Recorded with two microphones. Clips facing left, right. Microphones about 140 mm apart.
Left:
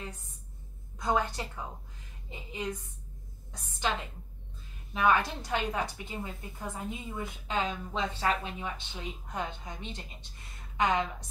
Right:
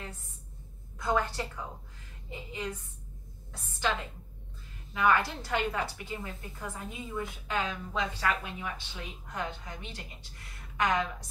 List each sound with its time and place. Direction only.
0.9 s a woman's voice: 20° left (ahead or behind)
4.9 s a woman's voice: 20° left (ahead or behind)